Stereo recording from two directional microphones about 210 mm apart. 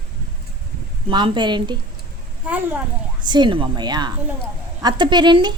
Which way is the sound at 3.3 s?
20° right (ahead or behind).